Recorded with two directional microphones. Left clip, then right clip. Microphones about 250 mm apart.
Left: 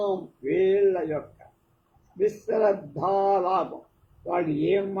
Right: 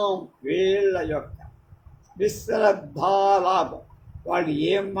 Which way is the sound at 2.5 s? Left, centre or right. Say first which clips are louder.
Right 4 dB; right.